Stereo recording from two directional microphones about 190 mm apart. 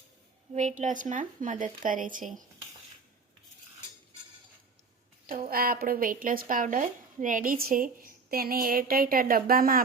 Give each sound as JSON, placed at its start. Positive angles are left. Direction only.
{"t": 0.5, "sound": "speech", "side_deg": -40}
{"t": 5.2, "sound": "speech", "side_deg": -45}